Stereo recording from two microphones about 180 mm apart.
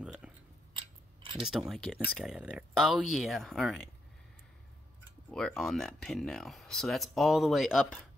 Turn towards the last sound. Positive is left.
turn(degrees=0)  # may be behind; listen again after turning